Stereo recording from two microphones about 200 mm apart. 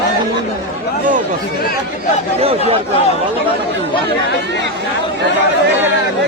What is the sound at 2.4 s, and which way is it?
Speech, 30° right (ahead or behind).